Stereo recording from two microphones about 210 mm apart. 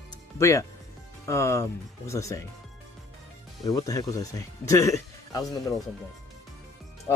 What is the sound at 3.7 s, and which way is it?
Speech, 15° left (ahead or behind).